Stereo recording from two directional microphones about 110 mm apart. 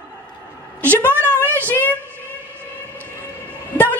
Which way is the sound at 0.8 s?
15° left (ahead or behind).